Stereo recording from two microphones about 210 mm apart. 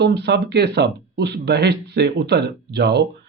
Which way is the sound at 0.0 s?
55° right (ahead or behind).